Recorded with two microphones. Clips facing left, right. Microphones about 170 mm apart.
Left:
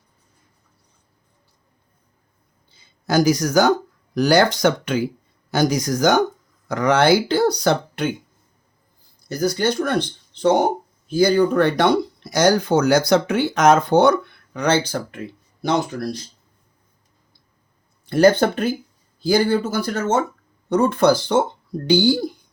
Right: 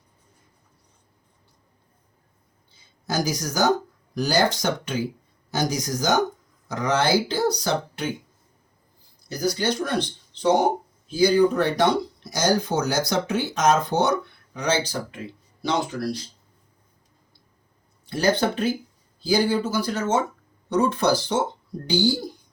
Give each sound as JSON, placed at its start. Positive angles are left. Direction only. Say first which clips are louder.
{"t": 2.8, "sound": "speech", "louder": "left 9 dB", "side_deg": 65}
{"t": 9.3, "sound": "speech", "louder": "left 4 dB", "side_deg": 50}
{"t": 15.9, "sound": "speech", "louder": "left 1 dB", "side_deg": 40}
{"t": 18.0, "sound": "speech", "louder": "left 7 dB", "side_deg": 55}